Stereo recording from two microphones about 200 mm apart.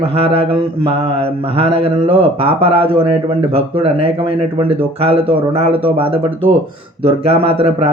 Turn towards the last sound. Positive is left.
turn(degrees=-30)  # may be behind; listen again after turning